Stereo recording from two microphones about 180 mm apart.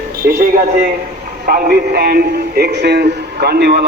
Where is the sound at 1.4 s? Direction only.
55° right (ahead or behind).